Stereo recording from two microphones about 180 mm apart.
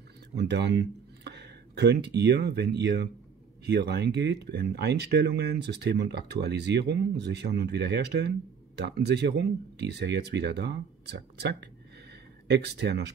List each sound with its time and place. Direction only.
0.4 s speech: 65° right (ahead or behind)